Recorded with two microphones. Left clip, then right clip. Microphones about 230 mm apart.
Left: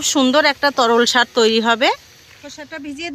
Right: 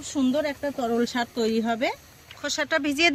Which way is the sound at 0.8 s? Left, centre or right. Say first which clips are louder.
Left 11 dB; left.